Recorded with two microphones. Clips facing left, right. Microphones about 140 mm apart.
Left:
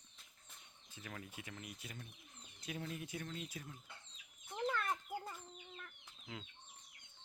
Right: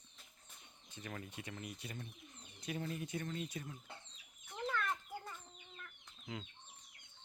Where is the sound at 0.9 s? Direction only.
Centre (ahead or behind).